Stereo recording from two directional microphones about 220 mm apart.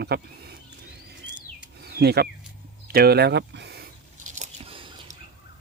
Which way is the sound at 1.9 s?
45° right (ahead or behind).